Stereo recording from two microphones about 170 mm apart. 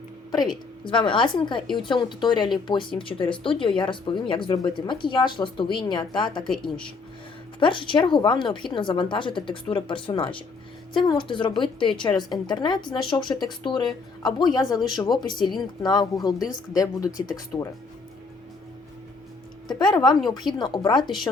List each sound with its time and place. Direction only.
0.9 s speech: 30° left (ahead or behind)
7.6 s speech: 30° left (ahead or behind)
17.5 s speech: 10° left (ahead or behind)
19.6 s speech: 25° left (ahead or behind)